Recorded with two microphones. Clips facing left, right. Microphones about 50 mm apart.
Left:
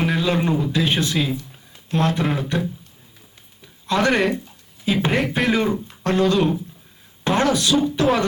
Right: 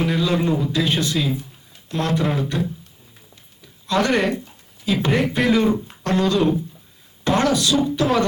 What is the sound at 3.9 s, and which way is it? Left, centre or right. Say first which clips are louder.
A man's voice: even; left.